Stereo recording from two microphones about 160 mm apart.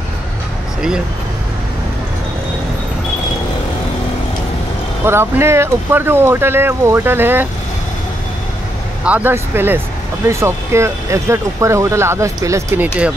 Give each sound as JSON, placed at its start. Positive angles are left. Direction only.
{"t": 5.0, "sound": "speech", "side_deg": -15}
{"t": 9.0, "sound": "speech", "side_deg": -10}